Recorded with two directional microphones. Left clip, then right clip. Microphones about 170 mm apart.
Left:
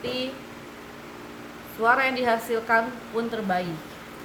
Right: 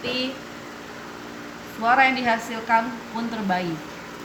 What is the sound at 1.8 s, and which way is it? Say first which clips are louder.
Speech: right 3 dB; 20° left (ahead or behind).